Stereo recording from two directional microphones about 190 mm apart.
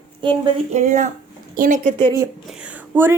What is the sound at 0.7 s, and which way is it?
A woman's voice, 40° right (ahead or behind).